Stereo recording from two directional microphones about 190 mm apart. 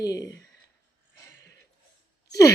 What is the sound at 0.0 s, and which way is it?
Speech, 20° left (ahead or behind).